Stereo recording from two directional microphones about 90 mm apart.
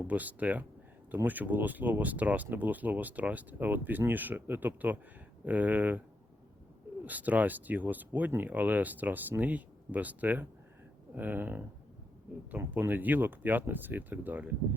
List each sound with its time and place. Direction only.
0.1 s speech: 15° right (ahead or behind)
7.0 s speech: 20° right (ahead or behind)